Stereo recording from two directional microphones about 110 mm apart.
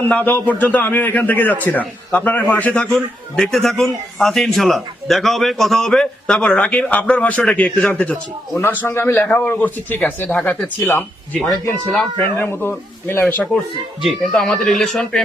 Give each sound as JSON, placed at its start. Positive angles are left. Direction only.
{"t": 0.0, "sound": "a man's voice", "side_deg": 15}
{"t": 8.5, "sound": "a man's voice", "side_deg": 20}
{"t": 13.2, "sound": "a man's voice", "side_deg": 10}